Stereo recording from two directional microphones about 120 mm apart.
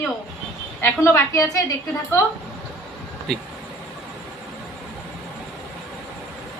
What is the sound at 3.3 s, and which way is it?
Speech, 5° left (ahead or behind).